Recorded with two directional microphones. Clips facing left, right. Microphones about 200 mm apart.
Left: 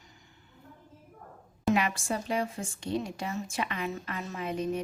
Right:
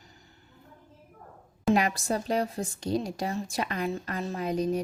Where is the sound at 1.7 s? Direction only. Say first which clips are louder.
Right 4 dB; 40° right (ahead or behind).